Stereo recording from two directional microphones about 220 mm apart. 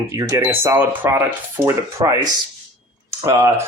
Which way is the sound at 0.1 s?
15° right (ahead or behind).